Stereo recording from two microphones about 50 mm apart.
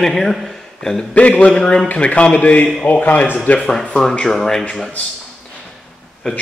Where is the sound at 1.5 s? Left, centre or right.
Centre.